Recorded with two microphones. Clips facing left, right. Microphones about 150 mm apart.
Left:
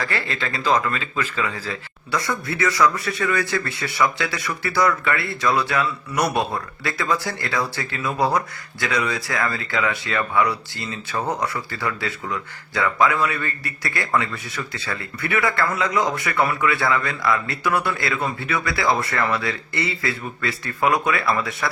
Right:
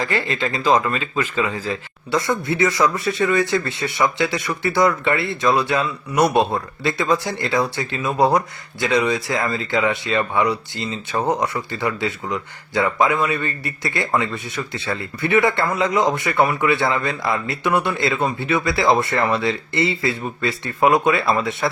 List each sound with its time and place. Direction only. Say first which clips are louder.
0.0 s speech: right 4 dB; 15° right (ahead or behind)